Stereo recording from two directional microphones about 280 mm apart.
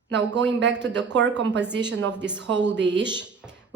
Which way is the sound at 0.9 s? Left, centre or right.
Right.